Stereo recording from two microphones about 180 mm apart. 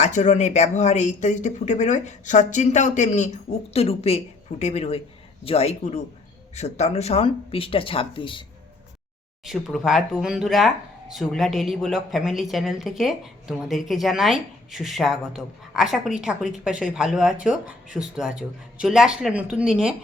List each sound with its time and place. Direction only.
0.0 s speech: 40° left (ahead or behind)
9.4 s speech: centre (ahead or behind)